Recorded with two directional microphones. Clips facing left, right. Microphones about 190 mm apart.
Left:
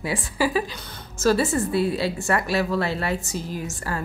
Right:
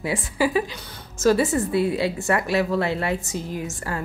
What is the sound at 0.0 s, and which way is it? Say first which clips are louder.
A woman's voice: right 1 dB; 20° right (ahead or behind).